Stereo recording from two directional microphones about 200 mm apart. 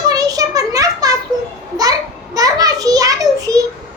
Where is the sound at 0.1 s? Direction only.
20° right (ahead or behind).